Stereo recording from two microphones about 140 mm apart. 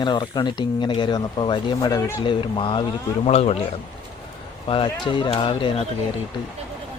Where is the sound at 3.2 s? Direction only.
50° left (ahead or behind).